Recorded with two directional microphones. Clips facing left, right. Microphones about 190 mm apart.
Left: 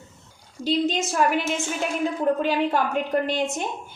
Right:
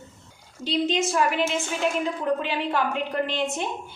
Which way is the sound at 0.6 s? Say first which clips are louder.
Left 1 dB; 45° left (ahead or behind).